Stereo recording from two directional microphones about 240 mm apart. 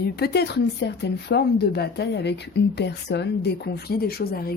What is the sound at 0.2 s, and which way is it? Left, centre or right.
A woman's voice, left.